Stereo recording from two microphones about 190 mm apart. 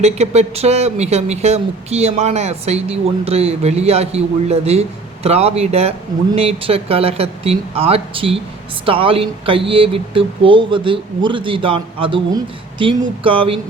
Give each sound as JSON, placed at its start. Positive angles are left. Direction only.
{"t": 0.0, "sound": "speech", "side_deg": -35}